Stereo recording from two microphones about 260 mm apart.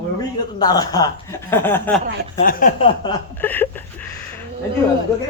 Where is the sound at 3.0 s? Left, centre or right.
Centre.